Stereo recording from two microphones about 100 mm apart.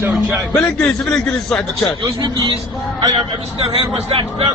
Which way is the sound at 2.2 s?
45° right (ahead or behind).